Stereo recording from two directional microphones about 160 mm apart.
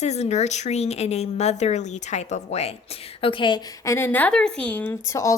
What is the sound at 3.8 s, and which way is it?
Speech, 15° left (ahead or behind).